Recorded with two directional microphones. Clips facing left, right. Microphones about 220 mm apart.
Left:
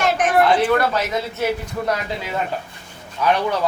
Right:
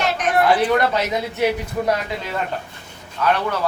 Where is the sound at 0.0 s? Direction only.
50° left (ahead or behind).